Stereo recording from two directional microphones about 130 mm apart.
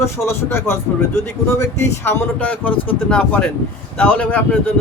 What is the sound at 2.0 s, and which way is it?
Speech, 15° left (ahead or behind).